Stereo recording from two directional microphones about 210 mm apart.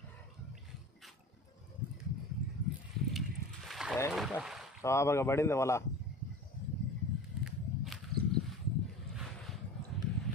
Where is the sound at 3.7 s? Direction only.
Centre (ahead or behind).